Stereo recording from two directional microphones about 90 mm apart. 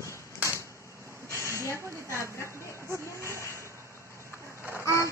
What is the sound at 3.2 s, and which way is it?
Vehicle, 30° left (ahead or behind).